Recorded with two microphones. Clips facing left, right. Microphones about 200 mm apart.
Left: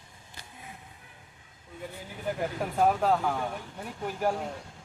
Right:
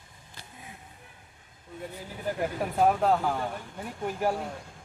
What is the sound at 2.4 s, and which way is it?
Speech, 5° right (ahead or behind).